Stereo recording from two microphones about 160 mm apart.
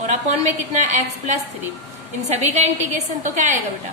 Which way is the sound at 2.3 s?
45° right (ahead or behind).